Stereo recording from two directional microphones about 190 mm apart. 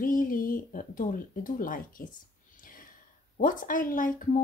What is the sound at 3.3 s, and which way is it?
Speech, 45° left (ahead or behind).